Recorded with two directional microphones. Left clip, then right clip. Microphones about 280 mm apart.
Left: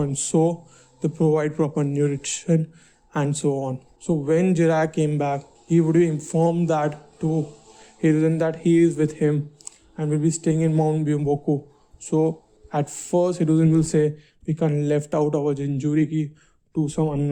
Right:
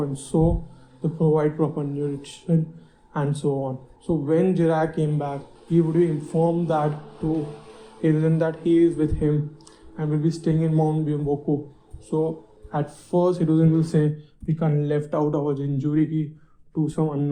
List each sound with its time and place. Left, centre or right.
0.0 s speech: left
8.0 s speech: left